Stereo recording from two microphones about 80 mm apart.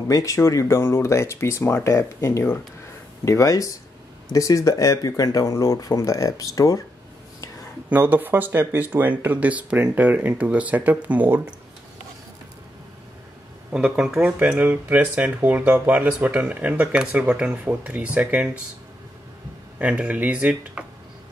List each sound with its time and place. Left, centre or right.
0.1 s speech: left
3.3 s speech: left
7.9 s speech: right
13.7 s speech: centre
19.8 s speech: centre